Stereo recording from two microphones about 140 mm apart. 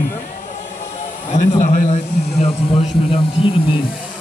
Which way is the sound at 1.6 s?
85° left.